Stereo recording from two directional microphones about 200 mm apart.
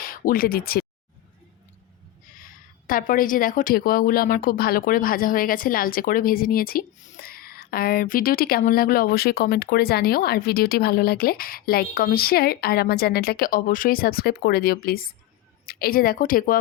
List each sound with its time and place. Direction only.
0.0 s speech: 45° left (ahead or behind)
2.4 s speech: 45° left (ahead or behind)